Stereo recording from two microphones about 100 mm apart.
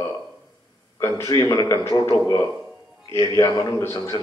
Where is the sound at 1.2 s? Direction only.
30° left (ahead or behind).